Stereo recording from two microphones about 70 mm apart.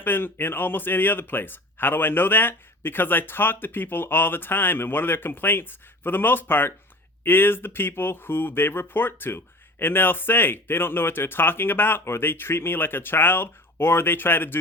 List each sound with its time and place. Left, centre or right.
0.0 s speech: left